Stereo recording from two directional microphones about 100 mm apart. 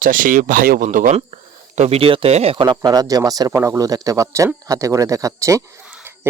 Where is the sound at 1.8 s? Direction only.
80° right.